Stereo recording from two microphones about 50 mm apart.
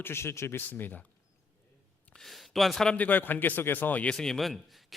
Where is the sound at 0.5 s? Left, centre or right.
Left.